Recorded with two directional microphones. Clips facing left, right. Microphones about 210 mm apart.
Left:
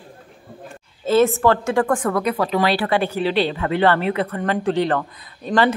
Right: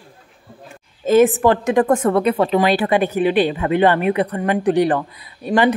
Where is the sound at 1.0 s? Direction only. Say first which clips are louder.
Right 3 dB; 15° right (ahead or behind).